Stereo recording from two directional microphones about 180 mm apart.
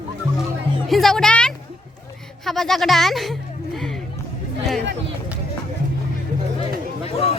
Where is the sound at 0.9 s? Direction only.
Centre (ahead or behind).